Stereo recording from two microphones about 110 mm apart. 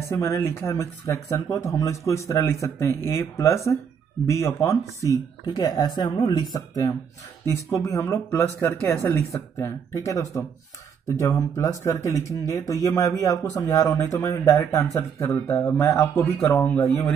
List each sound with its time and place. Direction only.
0.1 s speech: 25° left (ahead or behind)
15.0 s speech: 20° left (ahead or behind)